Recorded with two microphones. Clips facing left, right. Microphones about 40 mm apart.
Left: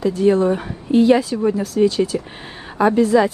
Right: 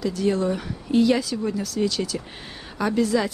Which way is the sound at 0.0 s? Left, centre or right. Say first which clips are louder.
Left 7 dB; left.